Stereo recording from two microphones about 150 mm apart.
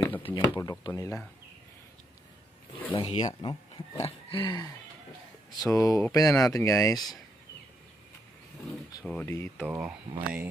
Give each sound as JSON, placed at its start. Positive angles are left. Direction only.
{"t": 0.2, "sound": "speech", "side_deg": 30}
{"t": 2.9, "sound": "a sound", "side_deg": 35}
{"t": 3.3, "sound": "speech", "side_deg": 30}
{"t": 4.0, "sound": "a sound", "side_deg": 35}
{"t": 5.7, "sound": "speech", "side_deg": 20}
{"t": 9.2, "sound": "speech", "side_deg": 15}
{"t": 9.6, "sound": "speech", "side_deg": -10}